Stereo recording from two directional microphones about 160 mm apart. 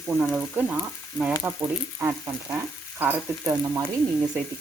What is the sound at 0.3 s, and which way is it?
A woman's voice, 10° right (ahead or behind).